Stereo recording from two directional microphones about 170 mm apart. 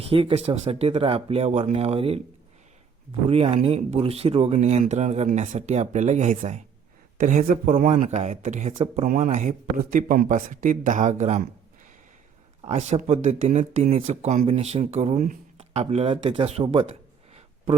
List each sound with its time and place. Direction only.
0.1 s speech: 35° right (ahead or behind)
3.2 s speech: 35° right (ahead or behind)
13.0 s speech: 45° right (ahead or behind)